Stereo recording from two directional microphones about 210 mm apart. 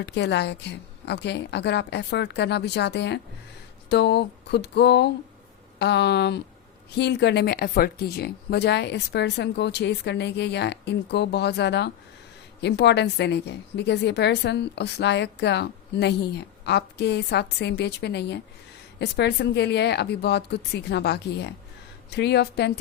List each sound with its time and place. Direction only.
0.0 s a woman's voice: 55° left (ahead or behind)